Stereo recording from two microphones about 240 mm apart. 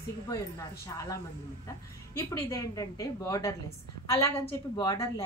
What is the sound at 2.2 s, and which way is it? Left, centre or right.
A woman's voice, centre.